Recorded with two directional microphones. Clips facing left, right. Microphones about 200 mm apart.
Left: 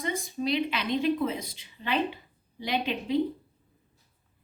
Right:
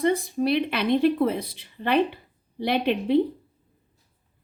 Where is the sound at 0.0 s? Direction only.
60° right (ahead or behind).